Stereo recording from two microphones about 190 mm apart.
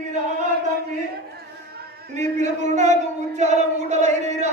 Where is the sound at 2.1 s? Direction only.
40° right (ahead or behind).